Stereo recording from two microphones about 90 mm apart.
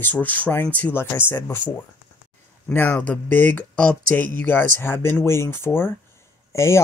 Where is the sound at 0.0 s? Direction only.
20° left (ahead or behind).